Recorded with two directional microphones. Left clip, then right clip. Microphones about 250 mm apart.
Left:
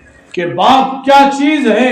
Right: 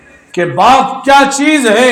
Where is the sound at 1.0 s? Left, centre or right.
Right.